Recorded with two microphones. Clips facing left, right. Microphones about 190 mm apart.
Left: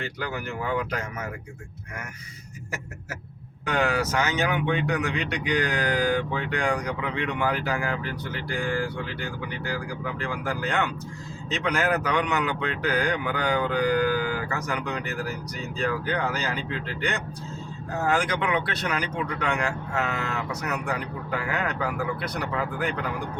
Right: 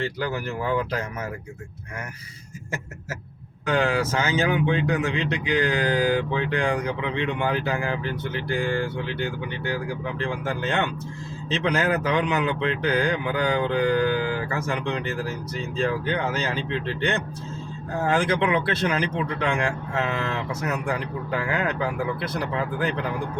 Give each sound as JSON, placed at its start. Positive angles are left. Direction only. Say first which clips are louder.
{"t": 0.0, "sound": "speech", "louder": "right 4 dB", "side_deg": -35}
{"t": 3.7, "sound": "speech", "louder": "right 2 dB", "side_deg": -30}